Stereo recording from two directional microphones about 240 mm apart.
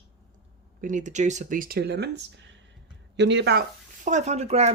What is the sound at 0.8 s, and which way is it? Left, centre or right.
Speech, right.